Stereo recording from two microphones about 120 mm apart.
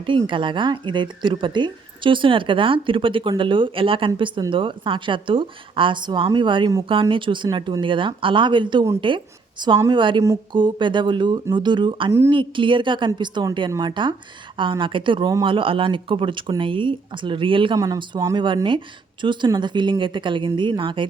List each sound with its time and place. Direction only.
0.0 s a woman's voice: 45° right (ahead or behind)
17.7 s speech: 30° right (ahead or behind)
18.3 s a woman's voice: 40° right (ahead or behind)